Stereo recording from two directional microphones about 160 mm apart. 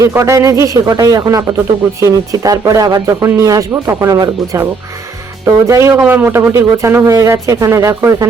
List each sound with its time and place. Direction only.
0.0 s speech: 20° right (ahead or behind)